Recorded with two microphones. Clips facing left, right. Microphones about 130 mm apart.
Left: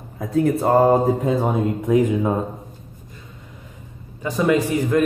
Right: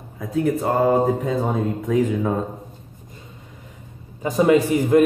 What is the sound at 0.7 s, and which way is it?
Mantra, 30° left (ahead or behind).